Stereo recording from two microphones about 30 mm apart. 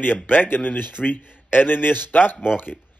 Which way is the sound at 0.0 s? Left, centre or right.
Left.